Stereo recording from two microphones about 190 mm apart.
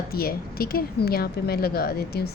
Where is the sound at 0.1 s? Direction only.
50° left (ahead or behind).